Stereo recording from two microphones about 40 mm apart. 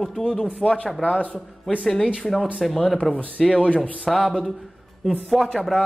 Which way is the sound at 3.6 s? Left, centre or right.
Left.